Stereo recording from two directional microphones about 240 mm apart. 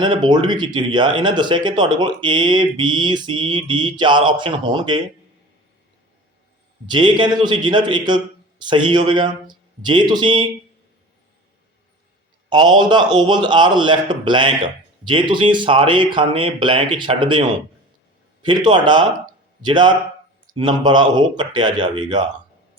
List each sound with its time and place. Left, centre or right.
0.0 s a man's voice: centre
6.8 s a man's voice: centre
12.5 s a man's voice: centre